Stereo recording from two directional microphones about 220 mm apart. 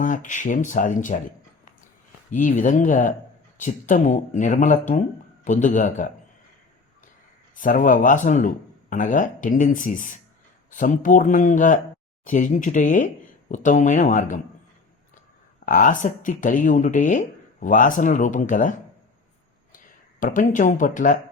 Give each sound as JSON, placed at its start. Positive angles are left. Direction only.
{"t": 0.0, "sound": "speech", "side_deg": 35}
{"t": 2.3, "sound": "speech", "side_deg": 35}
{"t": 7.5, "sound": "speech", "side_deg": 35}
{"t": 15.6, "sound": "speech", "side_deg": 35}
{"t": 20.1, "sound": "speech", "side_deg": 35}